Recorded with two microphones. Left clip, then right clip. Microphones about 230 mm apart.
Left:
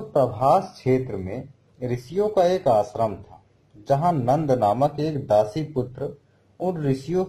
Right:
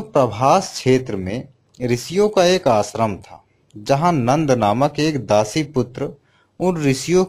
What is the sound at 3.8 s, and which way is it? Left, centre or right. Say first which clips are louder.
A man's voice: right 4 dB; right.